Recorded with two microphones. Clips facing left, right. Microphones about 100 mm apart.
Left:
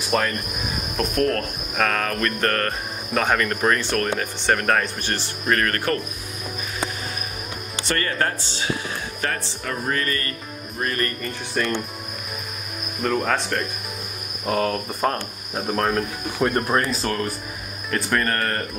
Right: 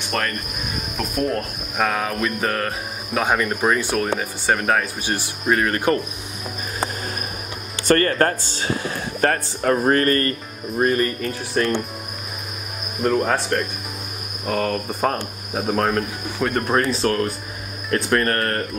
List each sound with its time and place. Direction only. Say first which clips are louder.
0.1 s cricket: left 3 dB; 5° left (ahead or behind)
0.9 s speech: left 1 dB; 10° right (ahead or behind)
7.8 s speech: right 7 dB; 45° right (ahead or behind)
10.8 s speech: right 7 dB; 25° right (ahead or behind)
11.2 s cricket: right 4 dB; centre (ahead or behind)
13.0 s speech: right 3 dB; 10° right (ahead or behind)
14.4 s cricket: even; 15° left (ahead or behind)
14.7 s cricket: right 1 dB; centre (ahead or behind)